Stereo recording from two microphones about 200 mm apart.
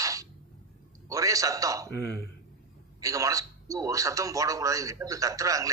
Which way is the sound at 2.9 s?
15° right (ahead or behind).